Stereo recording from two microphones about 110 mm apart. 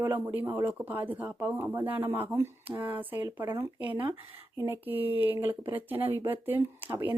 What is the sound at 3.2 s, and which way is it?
Speech, 30° right (ahead or behind).